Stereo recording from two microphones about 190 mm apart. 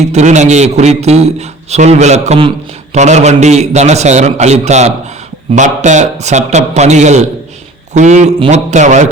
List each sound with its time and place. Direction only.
0.0 s a man's voice: 35° right (ahead or behind)